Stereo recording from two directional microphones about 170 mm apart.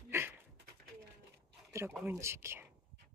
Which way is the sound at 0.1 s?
15° right (ahead or behind).